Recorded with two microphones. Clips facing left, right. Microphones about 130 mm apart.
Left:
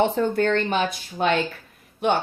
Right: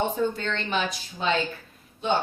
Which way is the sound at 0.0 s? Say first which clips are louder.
Left 6 dB; 60° left (ahead or behind).